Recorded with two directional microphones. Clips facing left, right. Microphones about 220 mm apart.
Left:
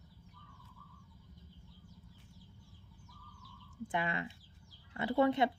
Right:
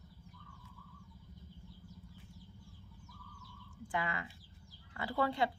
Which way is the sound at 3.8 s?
25° left (ahead or behind).